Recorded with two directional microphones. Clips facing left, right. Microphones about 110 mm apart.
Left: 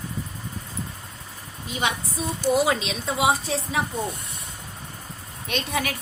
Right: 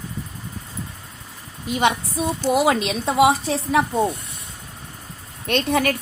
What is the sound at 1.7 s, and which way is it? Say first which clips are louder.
A woman's voice: right 7 dB; 70° right (ahead or behind).